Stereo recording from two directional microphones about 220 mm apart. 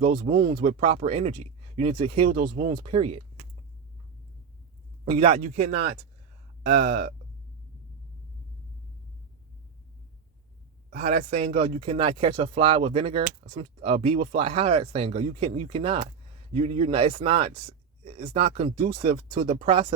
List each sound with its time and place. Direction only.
0.5 s speech: 30° right (ahead or behind)
2.2 s a man's voice: 35° right (ahead or behind)
2.6 s speech: 25° right (ahead or behind)
5.0 s a man's voice: 30° right (ahead or behind)
10.9 s a man's voice: 40° right (ahead or behind)
11.3 s speech: 25° right (ahead or behind)